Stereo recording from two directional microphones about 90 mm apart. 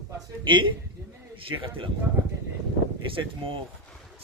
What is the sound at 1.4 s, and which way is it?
Speech, 80° right.